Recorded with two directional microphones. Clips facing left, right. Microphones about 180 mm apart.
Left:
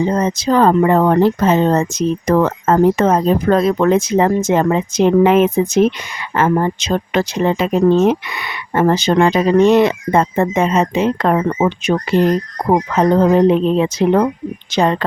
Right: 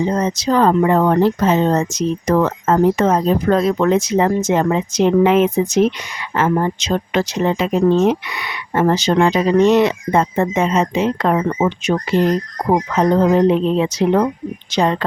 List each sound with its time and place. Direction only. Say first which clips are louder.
0.2 s speech: left 2 dB; 55° left (ahead or behind)